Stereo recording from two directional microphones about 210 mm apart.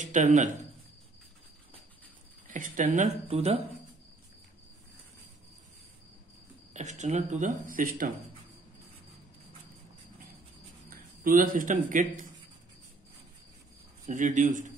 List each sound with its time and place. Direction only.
0.0 s speech: 35° right (ahead or behind)
2.5 s speech: 40° right (ahead or behind)
6.7 s speech: 35° right (ahead or behind)
10.9 s a man's voice: 40° right (ahead or behind)
14.0 s speech: 35° right (ahead or behind)